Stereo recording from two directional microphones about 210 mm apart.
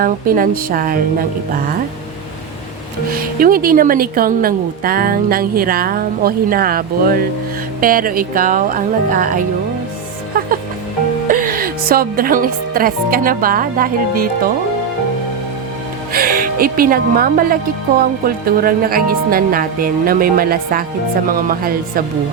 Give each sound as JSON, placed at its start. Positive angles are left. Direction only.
{"t": 0.0, "sound": "speech", "side_deg": -40}
{"t": 3.1, "sound": "speech", "side_deg": -45}
{"t": 10.3, "sound": "music", "side_deg": -40}
{"t": 11.3, "sound": "speech", "side_deg": -40}
{"t": 16.1, "sound": "a woman's voice", "side_deg": -45}